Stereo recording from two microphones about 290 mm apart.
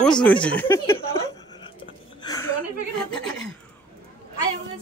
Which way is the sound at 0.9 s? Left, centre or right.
Centre.